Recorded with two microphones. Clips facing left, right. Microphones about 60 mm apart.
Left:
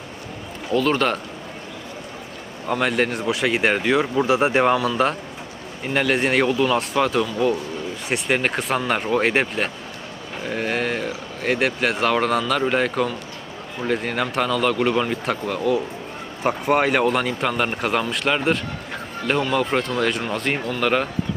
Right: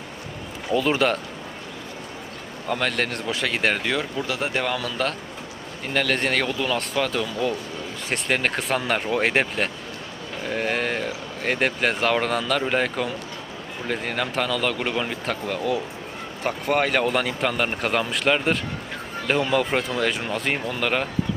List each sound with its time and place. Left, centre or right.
0.7 s speech: centre
2.6 s speech: centre
4.2 s speech: left; by 15.8 s centre
16.4 s speech: centre